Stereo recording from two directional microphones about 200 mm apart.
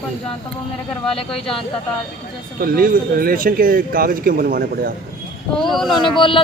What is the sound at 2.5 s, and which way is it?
Speech, 45° right (ahead or behind).